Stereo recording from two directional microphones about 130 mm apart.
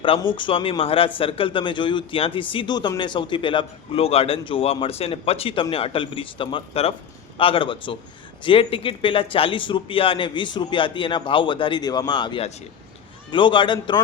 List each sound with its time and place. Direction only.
0.3 s a man's voice: 40° left (ahead or behind)